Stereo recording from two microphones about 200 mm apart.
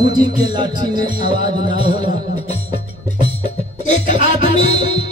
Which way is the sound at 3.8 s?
35° left (ahead or behind).